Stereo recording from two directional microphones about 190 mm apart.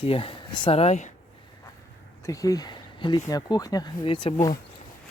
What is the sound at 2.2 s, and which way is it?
Speech, 15° left (ahead or behind).